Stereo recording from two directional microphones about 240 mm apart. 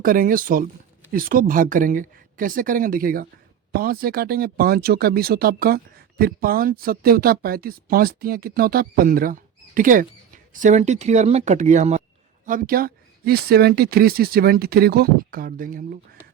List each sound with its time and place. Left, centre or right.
0.0 s speech: right